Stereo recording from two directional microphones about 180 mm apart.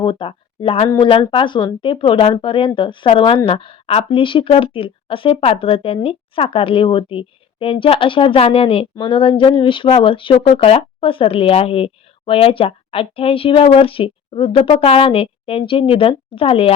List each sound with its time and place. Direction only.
0.0 s speech: 30° left (ahead or behind)